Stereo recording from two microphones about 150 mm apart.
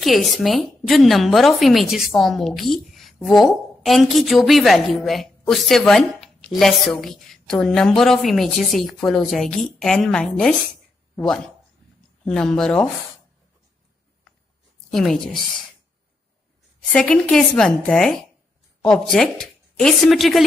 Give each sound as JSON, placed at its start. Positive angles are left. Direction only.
{"t": 0.0, "sound": "speech", "side_deg": 0}
{"t": 14.9, "sound": "speech", "side_deg": 5}
{"t": 16.9, "sound": "speech", "side_deg": 5}